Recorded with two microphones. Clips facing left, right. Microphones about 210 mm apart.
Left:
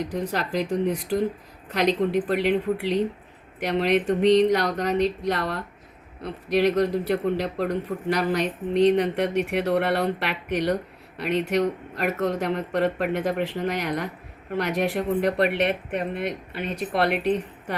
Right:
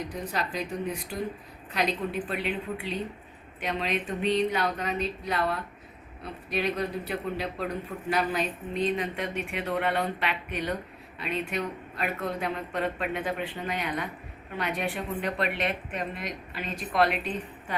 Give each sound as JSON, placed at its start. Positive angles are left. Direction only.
{"t": 0.1, "sound": "speech", "side_deg": 90}
{"t": 2.2, "sound": "speech", "side_deg": 75}